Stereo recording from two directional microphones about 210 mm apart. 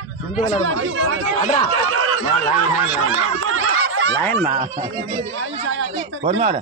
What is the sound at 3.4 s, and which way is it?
Snicker, 75° right (ahead or behind).